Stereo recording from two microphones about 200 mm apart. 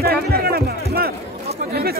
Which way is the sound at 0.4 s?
50° right (ahead or behind).